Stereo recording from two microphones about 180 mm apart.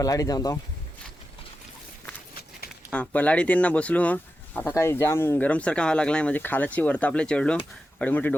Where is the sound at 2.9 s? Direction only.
5° left (ahead or behind).